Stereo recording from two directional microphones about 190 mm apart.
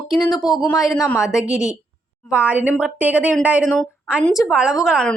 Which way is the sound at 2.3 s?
5° right (ahead or behind).